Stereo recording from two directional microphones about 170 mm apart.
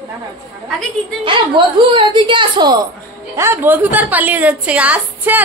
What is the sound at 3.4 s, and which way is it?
A woman's voice, 15° right (ahead or behind).